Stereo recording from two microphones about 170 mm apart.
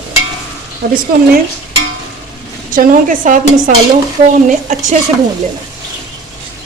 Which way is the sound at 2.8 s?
50° right (ahead or behind).